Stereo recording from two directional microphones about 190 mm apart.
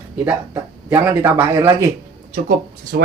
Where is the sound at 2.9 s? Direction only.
55° right (ahead or behind).